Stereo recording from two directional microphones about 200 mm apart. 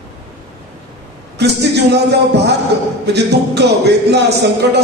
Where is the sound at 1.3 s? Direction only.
55° right (ahead or behind).